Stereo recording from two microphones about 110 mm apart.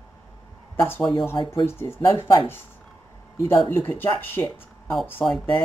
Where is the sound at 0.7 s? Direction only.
20° left (ahead or behind).